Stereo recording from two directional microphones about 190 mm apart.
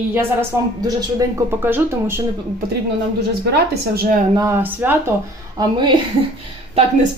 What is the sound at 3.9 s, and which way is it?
Speech, 50° right (ahead or behind).